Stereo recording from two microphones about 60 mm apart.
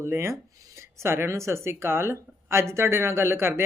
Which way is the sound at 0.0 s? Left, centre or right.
Right.